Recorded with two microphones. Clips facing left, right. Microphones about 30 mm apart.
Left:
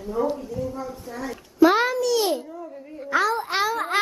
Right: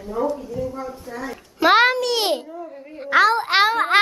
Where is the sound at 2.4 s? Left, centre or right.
Centre.